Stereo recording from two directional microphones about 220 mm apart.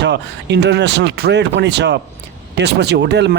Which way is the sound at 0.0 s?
50° right (ahead or behind).